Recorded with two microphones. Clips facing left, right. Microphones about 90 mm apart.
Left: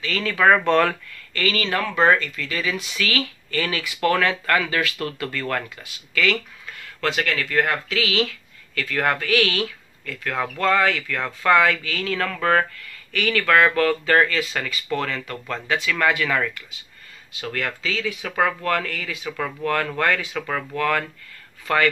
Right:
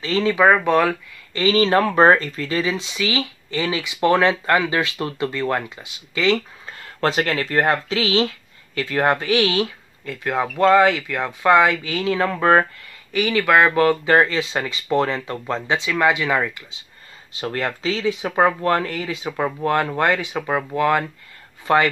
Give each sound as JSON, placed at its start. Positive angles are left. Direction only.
{"t": 0.0, "sound": "speech", "side_deg": -25}
{"t": 1.3, "sound": "speech", "side_deg": -25}
{"t": 1.8, "sound": "speech", "side_deg": -40}